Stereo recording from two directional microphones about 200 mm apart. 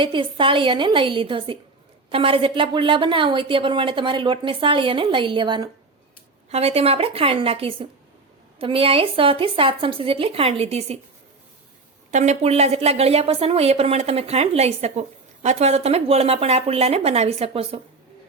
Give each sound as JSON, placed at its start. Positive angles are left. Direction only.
{"t": 0.0, "sound": "a woman's voice", "side_deg": -25}
{"t": 12.1, "sound": "a woman's voice", "side_deg": -35}